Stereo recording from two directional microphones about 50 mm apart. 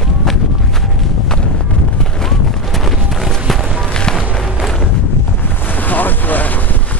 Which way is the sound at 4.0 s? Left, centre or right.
Centre.